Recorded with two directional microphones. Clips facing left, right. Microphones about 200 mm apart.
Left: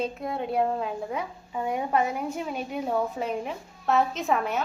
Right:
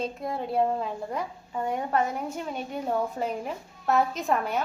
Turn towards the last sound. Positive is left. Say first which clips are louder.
# left 1 dB
turn(degrees=0)  # may be behind; listen again after turning